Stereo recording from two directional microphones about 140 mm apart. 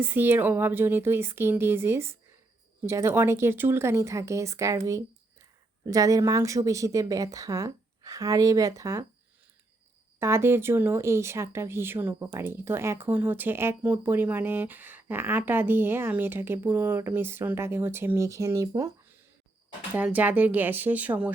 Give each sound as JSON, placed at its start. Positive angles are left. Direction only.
{"t": 0.0, "sound": "speech", "side_deg": -15}
{"t": 10.2, "sound": "speech", "side_deg": -20}
{"t": 19.9, "sound": "speech", "side_deg": -10}